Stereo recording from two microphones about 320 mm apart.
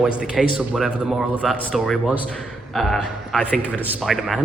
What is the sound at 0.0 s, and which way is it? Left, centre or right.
A man's voice, centre.